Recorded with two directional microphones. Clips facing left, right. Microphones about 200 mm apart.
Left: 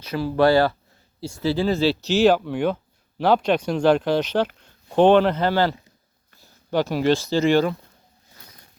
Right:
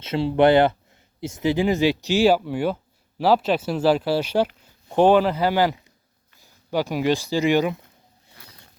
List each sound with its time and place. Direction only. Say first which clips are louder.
0.0 s speech: right 1 dB; 25° right (ahead or behind)